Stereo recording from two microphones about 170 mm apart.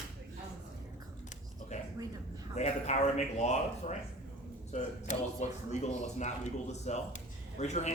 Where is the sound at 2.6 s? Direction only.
40° left (ahead or behind).